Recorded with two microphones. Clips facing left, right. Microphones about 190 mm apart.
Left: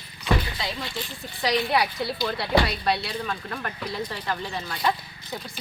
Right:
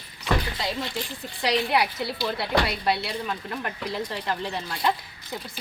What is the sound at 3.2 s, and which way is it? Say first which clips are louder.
Speech: right 1 dB; 15° right (ahead or behind).